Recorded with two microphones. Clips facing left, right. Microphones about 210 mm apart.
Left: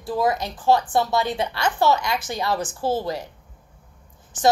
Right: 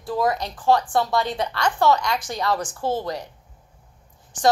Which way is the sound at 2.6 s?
5° left (ahead or behind).